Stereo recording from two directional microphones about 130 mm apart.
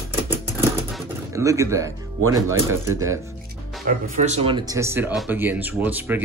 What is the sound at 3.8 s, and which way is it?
Speech, 70° right (ahead or behind).